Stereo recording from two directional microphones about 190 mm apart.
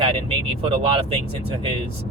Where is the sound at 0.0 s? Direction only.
30° right (ahead or behind).